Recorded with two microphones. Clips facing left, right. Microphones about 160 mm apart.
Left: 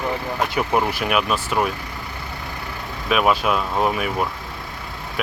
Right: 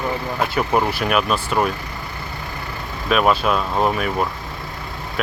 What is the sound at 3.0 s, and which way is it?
Speech, 10° left (ahead or behind).